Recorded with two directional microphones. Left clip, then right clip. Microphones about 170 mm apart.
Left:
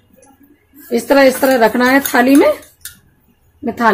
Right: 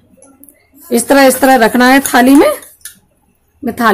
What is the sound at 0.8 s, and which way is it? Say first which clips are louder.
Speech: right 2 dB; 35° right (ahead or behind).